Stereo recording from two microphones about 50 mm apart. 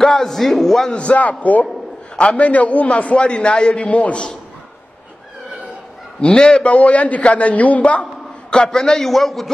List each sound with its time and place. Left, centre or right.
0.0 s a man's voice: centre
0.9 s a man's voice: left
6.2 s a man's voice: centre
8.5 s a man's voice: centre